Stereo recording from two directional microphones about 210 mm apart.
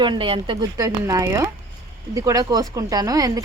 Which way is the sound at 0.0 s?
25° right (ahead or behind).